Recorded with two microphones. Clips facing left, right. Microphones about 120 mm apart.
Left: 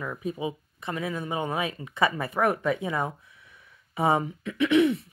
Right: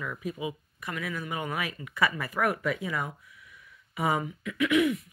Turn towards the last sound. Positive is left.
turn(degrees=30)  # may be behind; listen again after turning